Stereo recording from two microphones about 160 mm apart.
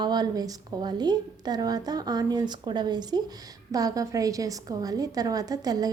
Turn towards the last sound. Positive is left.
turn(degrees=-25)  # may be behind; listen again after turning